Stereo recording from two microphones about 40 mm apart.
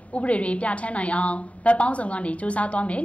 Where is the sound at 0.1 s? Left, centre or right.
Left.